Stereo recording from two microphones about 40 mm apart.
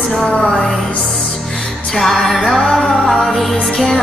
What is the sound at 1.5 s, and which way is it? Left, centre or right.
Music, centre.